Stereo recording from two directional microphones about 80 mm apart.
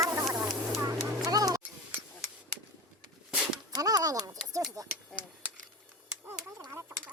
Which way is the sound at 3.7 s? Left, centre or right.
Right.